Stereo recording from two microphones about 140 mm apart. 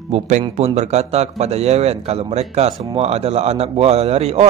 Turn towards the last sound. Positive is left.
turn(degrees=-50)  # may be behind; listen again after turning